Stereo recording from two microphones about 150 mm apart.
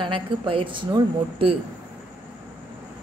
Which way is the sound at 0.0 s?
35° right (ahead or behind).